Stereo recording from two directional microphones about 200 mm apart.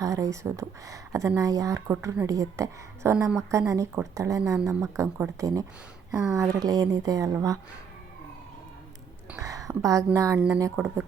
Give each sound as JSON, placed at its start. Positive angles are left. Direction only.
{"t": 0.0, "sound": "speech", "side_deg": -15}
{"t": 9.3, "sound": "speech", "side_deg": -15}